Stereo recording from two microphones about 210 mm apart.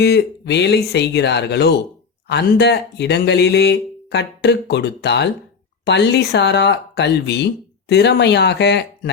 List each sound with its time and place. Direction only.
0.0 s speech: 55° left (ahead or behind)